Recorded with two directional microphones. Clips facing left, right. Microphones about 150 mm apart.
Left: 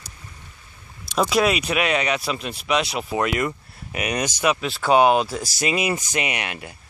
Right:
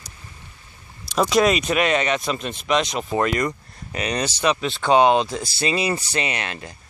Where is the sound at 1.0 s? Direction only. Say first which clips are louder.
Right 2 dB; centre (ahead or behind).